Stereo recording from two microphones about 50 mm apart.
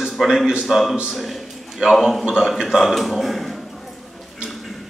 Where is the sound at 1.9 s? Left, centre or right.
Centre.